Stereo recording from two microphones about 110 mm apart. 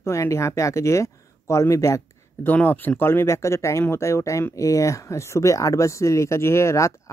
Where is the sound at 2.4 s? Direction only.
15° left (ahead or behind).